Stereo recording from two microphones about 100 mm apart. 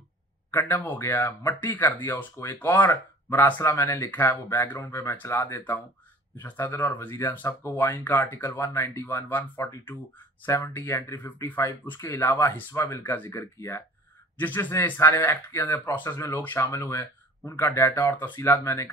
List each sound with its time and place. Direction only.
0.5 s speech: 20° left (ahead or behind)